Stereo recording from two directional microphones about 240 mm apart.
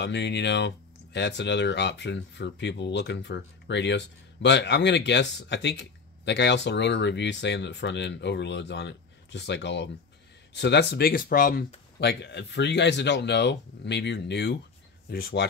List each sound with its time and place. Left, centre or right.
0.0 s speech: left